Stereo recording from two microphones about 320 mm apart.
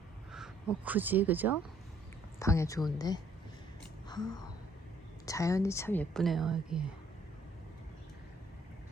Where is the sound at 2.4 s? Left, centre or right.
Centre.